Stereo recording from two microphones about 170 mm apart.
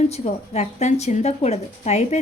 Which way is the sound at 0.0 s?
40° left (ahead or behind).